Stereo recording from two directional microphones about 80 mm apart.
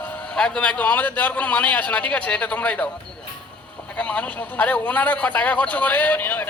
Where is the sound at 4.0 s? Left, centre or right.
Centre.